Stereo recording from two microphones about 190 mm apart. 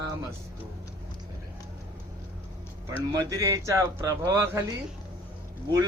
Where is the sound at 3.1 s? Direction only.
15° right (ahead or behind).